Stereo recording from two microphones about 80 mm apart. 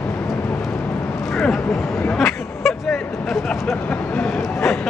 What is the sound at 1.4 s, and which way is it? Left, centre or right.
Speech, centre.